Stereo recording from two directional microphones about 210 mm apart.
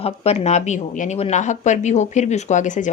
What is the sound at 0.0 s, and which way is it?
A woman's voice, 30° left (ahead or behind).